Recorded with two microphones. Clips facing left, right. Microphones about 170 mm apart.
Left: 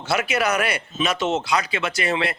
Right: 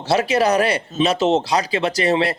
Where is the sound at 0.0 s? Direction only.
35° right (ahead or behind).